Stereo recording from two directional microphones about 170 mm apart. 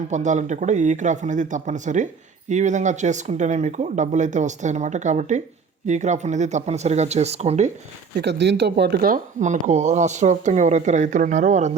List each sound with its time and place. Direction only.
0.1 s speech: 45° right (ahead or behind)
8.1 s speech: 85° right; by 11.7 s 45° right (ahead or behind)